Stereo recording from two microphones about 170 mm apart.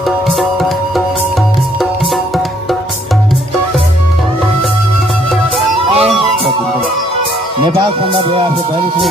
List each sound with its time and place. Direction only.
0.3 s music: centre (ahead or behind)
5.9 s music: 35° right (ahead or behind)
7.6 s speech: 35° right (ahead or behind)